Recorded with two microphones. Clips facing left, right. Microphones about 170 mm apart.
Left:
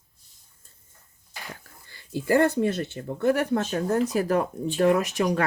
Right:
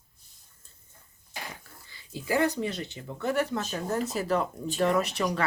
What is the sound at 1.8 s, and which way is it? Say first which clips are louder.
Speech: left 7 dB; 50° left (ahead or behind).